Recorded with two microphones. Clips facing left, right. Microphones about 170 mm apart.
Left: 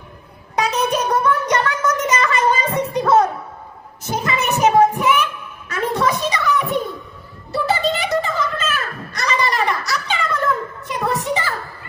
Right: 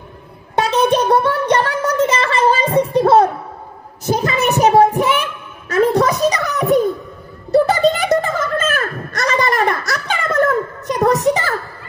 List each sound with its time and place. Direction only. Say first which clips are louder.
0.6 s music: right 5 dB; 30° right (ahead or behind)
4.0 s child singing: right 5 dB; 35° right (ahead or behind)
7.5 s a sound: right 7 dB; 50° right (ahead or behind)